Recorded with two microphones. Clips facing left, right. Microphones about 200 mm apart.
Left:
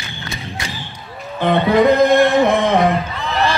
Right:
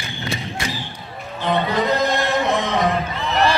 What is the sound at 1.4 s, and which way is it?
Music, 55° left (ahead or behind).